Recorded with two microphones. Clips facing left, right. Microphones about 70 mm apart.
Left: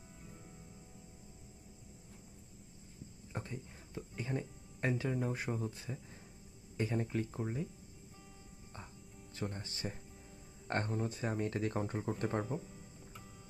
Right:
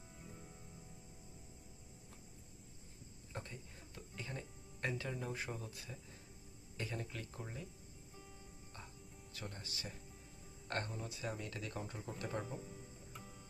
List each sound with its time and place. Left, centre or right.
0.2 s music: centre
3.3 s music: centre
5.2 s speech: left
9.3 s speech: left
12.6 s music: centre